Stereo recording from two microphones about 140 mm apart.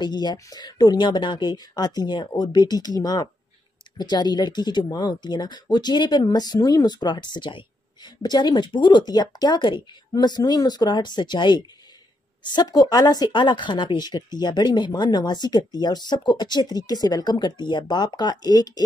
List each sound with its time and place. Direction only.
0.0 s speech: 30° left (ahead or behind)